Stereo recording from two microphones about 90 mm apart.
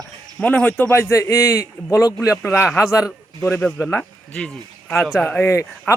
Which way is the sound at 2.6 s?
5° right (ahead or behind).